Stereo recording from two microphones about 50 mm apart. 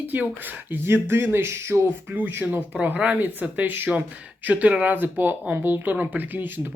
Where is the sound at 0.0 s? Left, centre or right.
Right.